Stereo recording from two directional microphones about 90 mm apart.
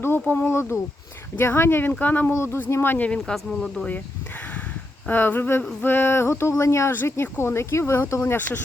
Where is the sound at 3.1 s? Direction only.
5° left (ahead or behind).